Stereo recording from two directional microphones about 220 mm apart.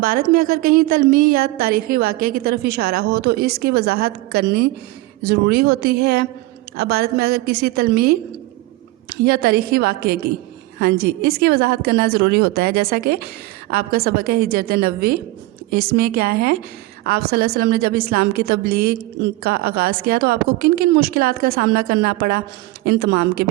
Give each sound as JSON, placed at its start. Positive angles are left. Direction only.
{"t": 0.0, "sound": "a woman's voice", "side_deg": -40}